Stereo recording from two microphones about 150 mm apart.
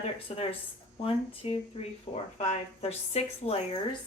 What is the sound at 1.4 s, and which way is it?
A woman's voice, 40° left (ahead or behind).